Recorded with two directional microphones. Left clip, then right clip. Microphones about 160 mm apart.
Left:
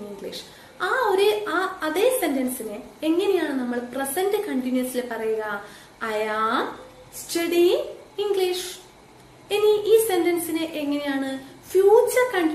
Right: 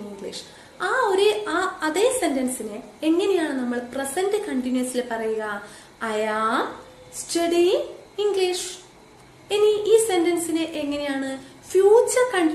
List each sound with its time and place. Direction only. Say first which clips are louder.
0.3 s a woman's voice: even; 20° right (ahead or behind)